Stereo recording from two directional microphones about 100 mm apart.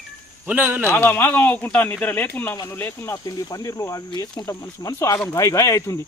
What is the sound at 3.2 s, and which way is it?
Speech, 35° left (ahead or behind).